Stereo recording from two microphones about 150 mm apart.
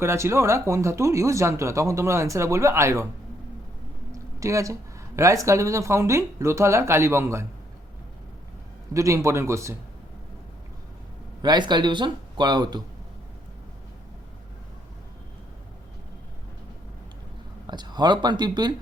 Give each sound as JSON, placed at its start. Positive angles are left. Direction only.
{"t": 0.0, "sound": "speech", "side_deg": -15}
{"t": 4.1, "sound": "speech", "side_deg": -20}
{"t": 8.9, "sound": "speech", "side_deg": -20}
{"t": 11.4, "sound": "speech", "side_deg": -30}
{"t": 17.7, "sound": "speech", "side_deg": -30}